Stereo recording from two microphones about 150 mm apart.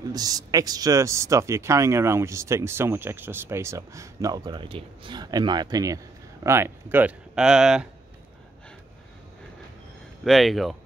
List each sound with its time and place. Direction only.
0.1 s speech: 25° right (ahead or behind); by 7.9 s 5° right (ahead or behind)
10.2 s speech: centre (ahead or behind)